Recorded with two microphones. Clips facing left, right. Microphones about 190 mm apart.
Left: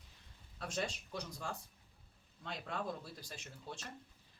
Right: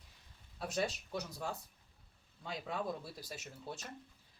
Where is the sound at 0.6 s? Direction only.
5° right (ahead or behind).